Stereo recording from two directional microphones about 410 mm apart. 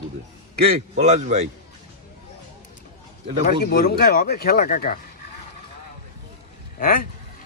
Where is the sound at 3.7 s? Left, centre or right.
Left.